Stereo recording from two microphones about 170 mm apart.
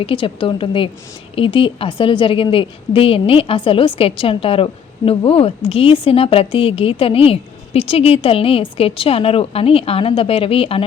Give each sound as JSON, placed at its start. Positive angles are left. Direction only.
{"t": 0.0, "sound": "a woman's voice", "side_deg": 30}